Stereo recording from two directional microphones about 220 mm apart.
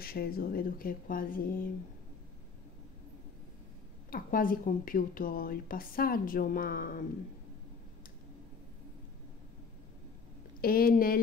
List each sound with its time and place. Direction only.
0.0 s a woman's voice: 45° left (ahead or behind)
4.1 s a woman's voice: 40° left (ahead or behind)
10.6 s a woman's voice: 40° left (ahead or behind)